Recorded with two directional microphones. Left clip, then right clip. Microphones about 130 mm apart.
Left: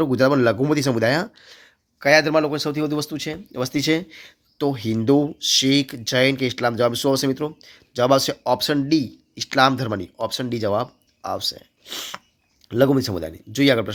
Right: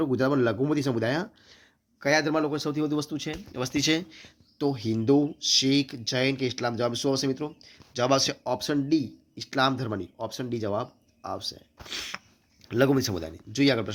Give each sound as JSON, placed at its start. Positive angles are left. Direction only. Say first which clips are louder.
{"t": 0.0, "sound": "speech", "louder": "left 7 dB", "side_deg": 30}